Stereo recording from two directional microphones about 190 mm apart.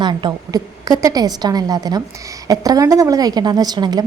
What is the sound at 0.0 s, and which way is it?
A woman's voice, 25° right (ahead or behind).